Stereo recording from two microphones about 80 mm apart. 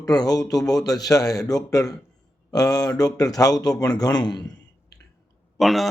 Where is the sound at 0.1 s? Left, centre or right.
Left.